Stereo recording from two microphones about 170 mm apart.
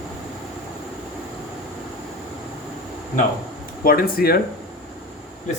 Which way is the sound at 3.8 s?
60° left (ahead or behind).